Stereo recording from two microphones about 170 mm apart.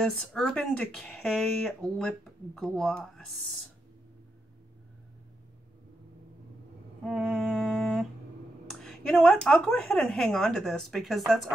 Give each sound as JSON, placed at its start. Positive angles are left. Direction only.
{"t": 0.0, "sound": "speech", "side_deg": 5}
{"t": 7.1, "sound": "music", "side_deg": 0}
{"t": 8.8, "sound": "speech", "side_deg": 5}